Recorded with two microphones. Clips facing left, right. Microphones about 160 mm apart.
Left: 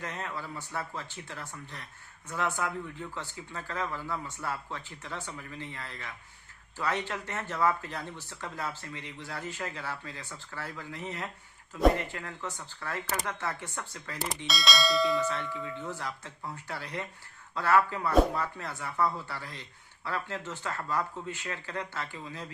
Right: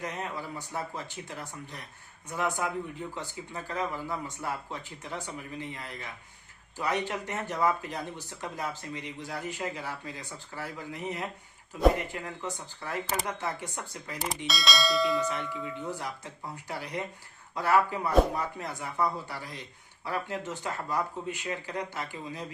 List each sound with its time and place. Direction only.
0.0 s speech: 15° right (ahead or behind)
14.2 s bell: centre (ahead or behind)
15.3 s speech: 15° right (ahead or behind)